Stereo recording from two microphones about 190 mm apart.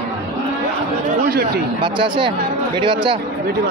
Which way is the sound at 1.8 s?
25° right (ahead or behind).